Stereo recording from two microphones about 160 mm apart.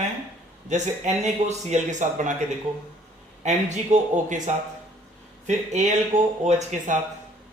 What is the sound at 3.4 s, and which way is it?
Speech, 45° right (ahead or behind).